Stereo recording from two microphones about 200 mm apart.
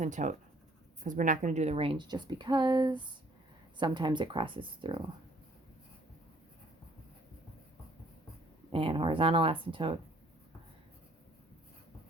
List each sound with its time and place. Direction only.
0.0 s a woman's voice: 40° right (ahead or behind)
8.7 s a woman's voice: 25° right (ahead or behind)